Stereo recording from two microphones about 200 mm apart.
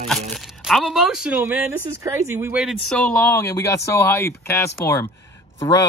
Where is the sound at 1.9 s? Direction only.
15° right (ahead or behind); by 5.8 s 10° left (ahead or behind).